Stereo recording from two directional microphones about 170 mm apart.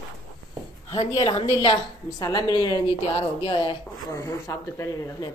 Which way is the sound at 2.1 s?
20° left (ahead or behind).